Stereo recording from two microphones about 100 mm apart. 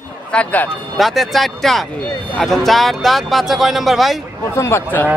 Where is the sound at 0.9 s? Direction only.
Centre (ahead or behind).